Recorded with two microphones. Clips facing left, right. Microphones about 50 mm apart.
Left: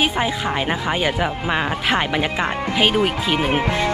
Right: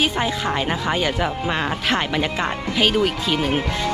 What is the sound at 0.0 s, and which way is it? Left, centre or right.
Speech, centre.